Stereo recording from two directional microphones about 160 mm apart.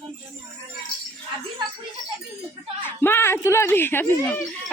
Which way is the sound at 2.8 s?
15° left (ahead or behind).